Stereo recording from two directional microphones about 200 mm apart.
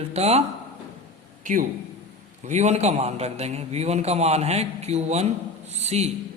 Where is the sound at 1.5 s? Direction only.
40° right (ahead or behind).